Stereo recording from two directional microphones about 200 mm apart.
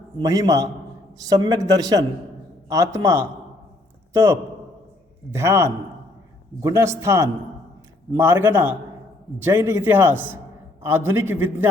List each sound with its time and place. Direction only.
0.2 s a man's voice: 15° right (ahead or behind)